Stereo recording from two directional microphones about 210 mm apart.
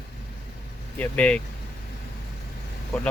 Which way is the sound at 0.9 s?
5° left (ahead or behind).